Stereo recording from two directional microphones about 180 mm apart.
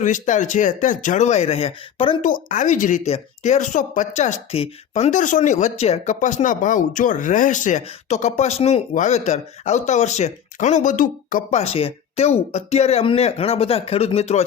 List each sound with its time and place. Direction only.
0.0 s speech: 45° left (ahead or behind)
2.2 s speech: 45° left (ahead or behind)